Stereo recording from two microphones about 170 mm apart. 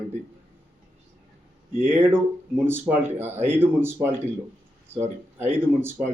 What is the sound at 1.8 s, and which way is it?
Speech, 15° right (ahead or behind).